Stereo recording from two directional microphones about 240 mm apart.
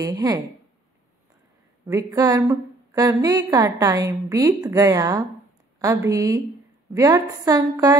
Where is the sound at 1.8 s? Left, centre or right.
Centre.